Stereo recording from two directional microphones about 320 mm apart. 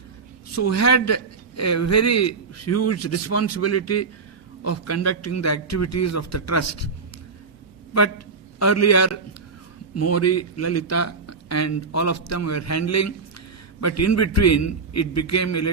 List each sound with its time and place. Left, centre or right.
0.5 s a man's voice: left
8.5 s a man's voice: left